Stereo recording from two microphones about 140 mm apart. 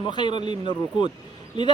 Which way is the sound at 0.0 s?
35° left (ahead or behind).